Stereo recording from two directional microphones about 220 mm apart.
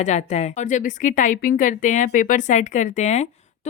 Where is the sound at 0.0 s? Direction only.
30° left (ahead or behind).